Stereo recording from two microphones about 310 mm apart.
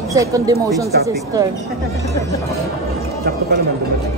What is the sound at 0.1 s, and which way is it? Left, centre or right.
Speech, centre.